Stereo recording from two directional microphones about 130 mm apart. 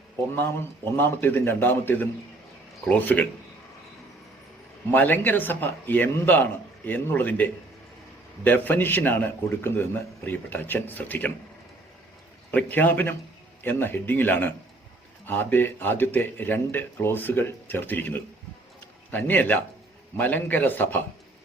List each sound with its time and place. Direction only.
0.3 s speech: 15° left (ahead or behind)
4.9 s speech: 15° left (ahead or behind)
12.5 s speech: 15° left (ahead or behind)